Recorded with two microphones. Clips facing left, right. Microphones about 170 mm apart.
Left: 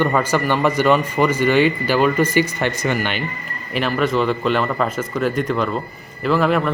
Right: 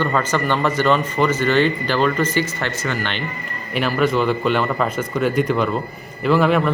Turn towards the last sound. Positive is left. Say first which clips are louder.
# right 1 dB
turn(degrees=0)  # may be behind; listen again after turning